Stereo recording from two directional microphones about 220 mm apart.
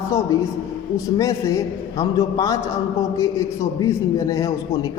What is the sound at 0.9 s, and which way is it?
A man's voice, 15° left (ahead or behind).